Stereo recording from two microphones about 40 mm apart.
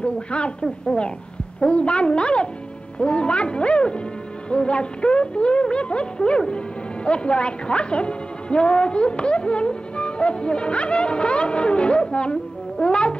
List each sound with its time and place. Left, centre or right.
0.0 s speech: left